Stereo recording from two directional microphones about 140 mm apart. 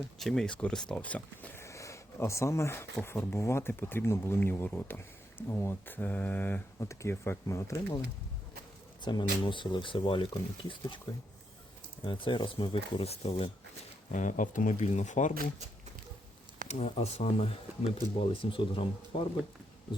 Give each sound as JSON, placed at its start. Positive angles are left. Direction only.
{"t": 0.2, "sound": "speech", "side_deg": 0}
{"t": 9.0, "sound": "speech", "side_deg": 30}
{"t": 12.0, "sound": "speech", "side_deg": 35}
{"t": 14.1, "sound": "speech", "side_deg": 65}
{"t": 16.6, "sound": "speech", "side_deg": 50}